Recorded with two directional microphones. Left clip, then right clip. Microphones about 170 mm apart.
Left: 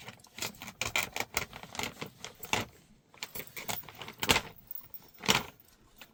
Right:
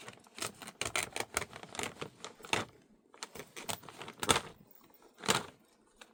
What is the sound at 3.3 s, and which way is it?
Keys jangling, 10° right (ahead or behind).